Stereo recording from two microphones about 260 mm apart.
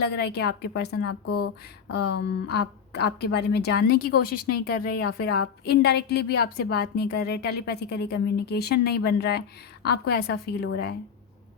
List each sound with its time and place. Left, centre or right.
0.0 s a woman's voice: left
1.2 s speech: left
1.9 s a woman's voice: left